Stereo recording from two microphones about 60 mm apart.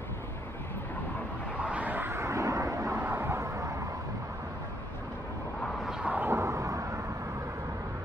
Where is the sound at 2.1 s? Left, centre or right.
Right.